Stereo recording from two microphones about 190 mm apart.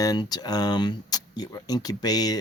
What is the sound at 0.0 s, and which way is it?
Speech, 20° left (ahead or behind).